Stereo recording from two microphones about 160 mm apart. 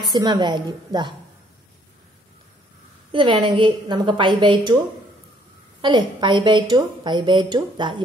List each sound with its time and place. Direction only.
0.1 s a woman's voice: 25° right (ahead or behind)
3.1 s a woman's voice: 30° right (ahead or behind)
5.8 s a woman's voice: 30° right (ahead or behind)